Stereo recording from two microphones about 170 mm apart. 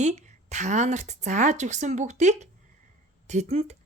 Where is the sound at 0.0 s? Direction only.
40° right (ahead or behind).